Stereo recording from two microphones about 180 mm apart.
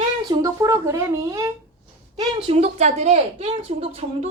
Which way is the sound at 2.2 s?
30° right (ahead or behind).